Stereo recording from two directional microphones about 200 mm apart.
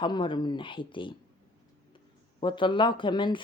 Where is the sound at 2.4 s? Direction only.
25° left (ahead or behind).